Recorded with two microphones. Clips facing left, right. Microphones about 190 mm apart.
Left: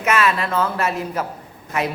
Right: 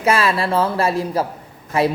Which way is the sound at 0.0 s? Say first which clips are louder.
Right 2 dB; 30° right (ahead or behind).